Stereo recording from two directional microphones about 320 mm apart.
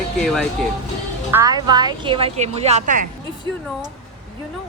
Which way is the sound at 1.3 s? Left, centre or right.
Centre.